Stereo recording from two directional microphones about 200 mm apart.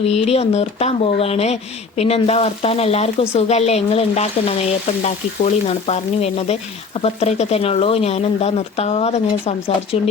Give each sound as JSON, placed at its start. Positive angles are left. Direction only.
{"t": 0.0, "sound": "speech", "side_deg": 30}